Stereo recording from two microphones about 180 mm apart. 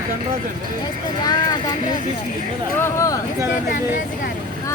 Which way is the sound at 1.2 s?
20° left (ahead or behind).